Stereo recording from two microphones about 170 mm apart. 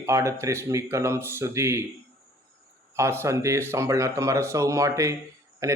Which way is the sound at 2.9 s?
15° right (ahead or behind).